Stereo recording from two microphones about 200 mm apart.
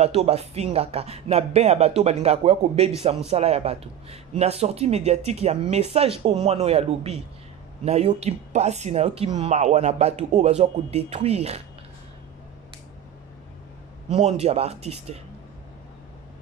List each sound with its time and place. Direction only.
0.0 s speech: 30° right (ahead or behind)
14.1 s speech: 35° right (ahead or behind)